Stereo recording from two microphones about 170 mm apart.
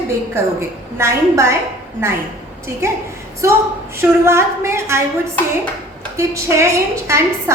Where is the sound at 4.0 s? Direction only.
15° right (ahead or behind).